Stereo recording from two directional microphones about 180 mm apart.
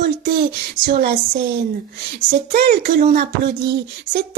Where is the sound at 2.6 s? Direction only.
60° right (ahead or behind).